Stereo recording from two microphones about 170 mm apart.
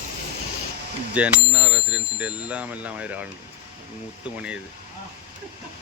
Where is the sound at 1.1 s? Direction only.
5° right (ahead or behind).